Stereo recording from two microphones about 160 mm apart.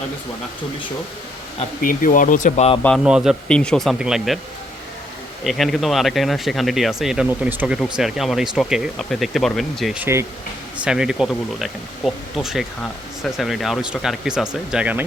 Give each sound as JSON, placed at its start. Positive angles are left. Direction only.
{"t": 1.8, "sound": "speech", "side_deg": 60}
{"t": 3.0, "sound": "speech", "side_deg": -5}
{"t": 3.5, "sound": "speech", "side_deg": 5}
{"t": 5.4, "sound": "speech", "side_deg": 0}